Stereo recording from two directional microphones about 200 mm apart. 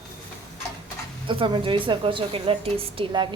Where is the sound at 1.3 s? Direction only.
25° right (ahead or behind).